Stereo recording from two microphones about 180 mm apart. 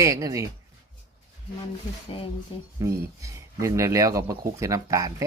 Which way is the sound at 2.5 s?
30° left (ahead or behind).